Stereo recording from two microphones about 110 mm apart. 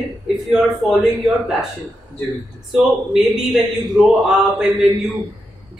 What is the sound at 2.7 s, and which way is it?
A man's voice, 5° right (ahead or behind).